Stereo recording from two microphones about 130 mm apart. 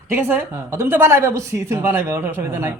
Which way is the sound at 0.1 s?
15° right (ahead or behind).